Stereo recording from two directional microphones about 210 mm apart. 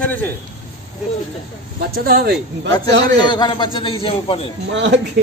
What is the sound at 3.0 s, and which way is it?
A man's voice, 20° left (ahead or behind).